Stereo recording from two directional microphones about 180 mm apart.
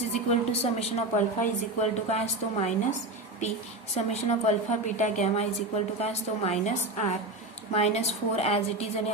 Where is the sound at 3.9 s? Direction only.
40° left (ahead or behind).